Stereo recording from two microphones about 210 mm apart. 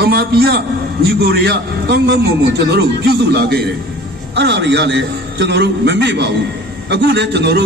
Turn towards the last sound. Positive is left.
turn(degrees=-55)  # may be behind; listen again after turning